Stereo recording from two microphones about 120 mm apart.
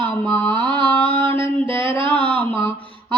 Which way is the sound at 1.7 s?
45° right (ahead or behind).